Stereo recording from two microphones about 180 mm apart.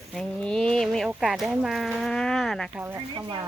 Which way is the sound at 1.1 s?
Centre (ahead or behind).